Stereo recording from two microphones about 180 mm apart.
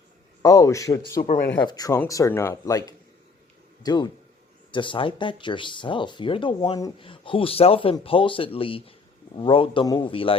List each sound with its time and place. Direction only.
0.4 s speech: 20° left (ahead or behind)
1.1 s speech: 50° left (ahead or behind)
1.5 s speech: 20° left (ahead or behind)